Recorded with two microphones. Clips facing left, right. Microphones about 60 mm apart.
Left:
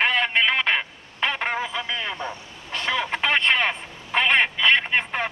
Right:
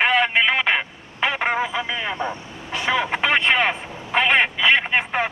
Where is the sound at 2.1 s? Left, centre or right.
Right.